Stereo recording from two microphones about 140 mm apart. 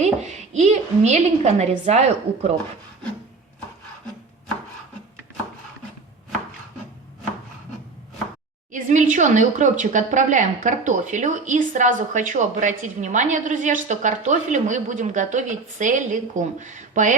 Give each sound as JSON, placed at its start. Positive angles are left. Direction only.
{"t": 0.0, "sound": "a woman's voice", "side_deg": -55}
{"t": 8.7, "sound": "speech", "side_deg": -65}